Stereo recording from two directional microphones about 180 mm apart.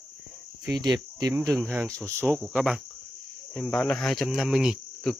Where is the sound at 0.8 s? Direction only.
25° right (ahead or behind).